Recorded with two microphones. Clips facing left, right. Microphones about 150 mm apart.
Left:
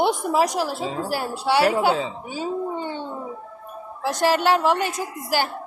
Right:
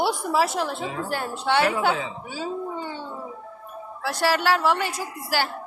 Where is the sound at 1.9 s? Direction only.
35° left (ahead or behind).